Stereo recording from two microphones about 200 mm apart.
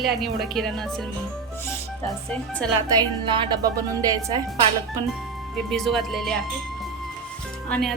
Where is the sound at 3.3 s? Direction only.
20° right (ahead or behind).